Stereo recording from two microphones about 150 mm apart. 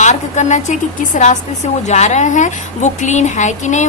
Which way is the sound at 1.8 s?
50° left (ahead or behind).